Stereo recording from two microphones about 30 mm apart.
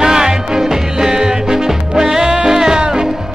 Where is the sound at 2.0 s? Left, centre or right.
Centre.